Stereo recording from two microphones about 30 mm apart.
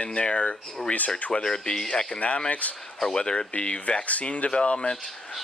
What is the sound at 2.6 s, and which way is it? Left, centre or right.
Speech, left.